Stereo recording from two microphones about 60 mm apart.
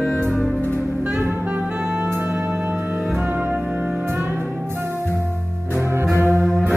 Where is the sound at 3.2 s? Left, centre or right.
Right.